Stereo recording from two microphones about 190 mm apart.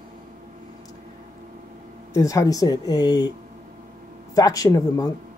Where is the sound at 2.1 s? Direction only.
15° left (ahead or behind).